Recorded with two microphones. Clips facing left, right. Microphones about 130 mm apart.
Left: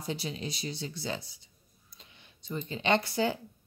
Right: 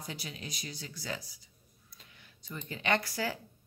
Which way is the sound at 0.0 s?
30° left (ahead or behind).